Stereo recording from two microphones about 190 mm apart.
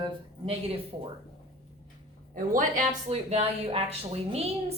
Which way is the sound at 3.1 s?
35° right (ahead or behind).